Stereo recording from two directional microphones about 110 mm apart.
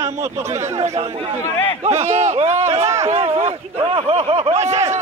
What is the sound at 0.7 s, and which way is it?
Chatter, 80° right.